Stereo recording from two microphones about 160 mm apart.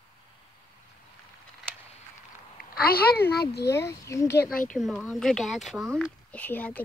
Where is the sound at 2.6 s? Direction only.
70° left (ahead or behind).